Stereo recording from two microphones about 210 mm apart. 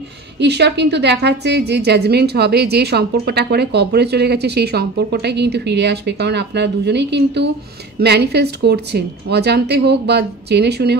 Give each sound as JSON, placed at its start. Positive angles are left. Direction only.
{"t": 0.4, "sound": "a woman's voice", "side_deg": -55}